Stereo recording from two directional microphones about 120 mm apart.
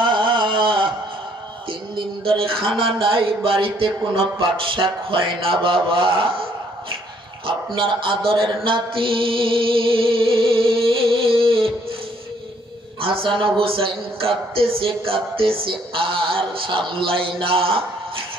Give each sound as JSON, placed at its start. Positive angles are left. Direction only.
{"t": 0.0, "sound": "a sound", "side_deg": -40}
{"t": 1.7, "sound": "music", "side_deg": -45}
{"t": 3.0, "sound": "speech", "side_deg": -45}
{"t": 13.0, "sound": "speech", "side_deg": -50}